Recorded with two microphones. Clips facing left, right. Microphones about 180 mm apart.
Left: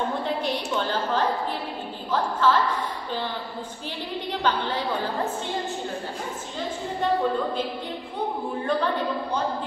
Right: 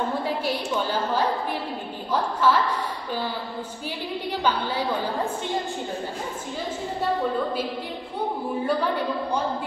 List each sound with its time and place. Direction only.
0.2 s a sound: 10° right (ahead or behind)
2.4 s a woman's voice: 10° right (ahead or behind)
4.3 s a woman's voice: 10° right (ahead or behind)
8.6 s a woman's voice: 10° right (ahead or behind)